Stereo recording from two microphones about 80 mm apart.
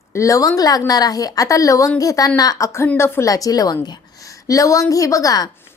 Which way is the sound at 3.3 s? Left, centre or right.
Left.